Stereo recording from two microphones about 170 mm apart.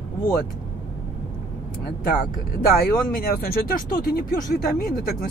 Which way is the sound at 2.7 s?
60° left (ahead or behind).